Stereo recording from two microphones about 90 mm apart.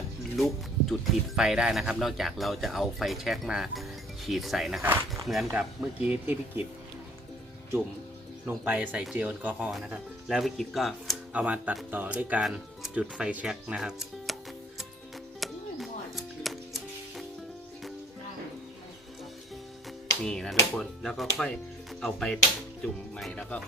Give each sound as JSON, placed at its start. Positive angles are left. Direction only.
{"t": 0.3, "sound": "speech", "side_deg": 0}
{"t": 4.8, "sound": "speech", "side_deg": -25}
{"t": 5.2, "sound": "speech", "side_deg": 0}
{"t": 5.5, "sound": "speech", "side_deg": -10}
{"t": 8.4, "sound": "speech", "side_deg": -20}
{"t": 9.7, "sound": "speech", "side_deg": -5}
{"t": 11.3, "sound": "speech", "side_deg": -15}
{"t": 15.4, "sound": "music", "side_deg": 0}
{"t": 20.2, "sound": "speech", "side_deg": 5}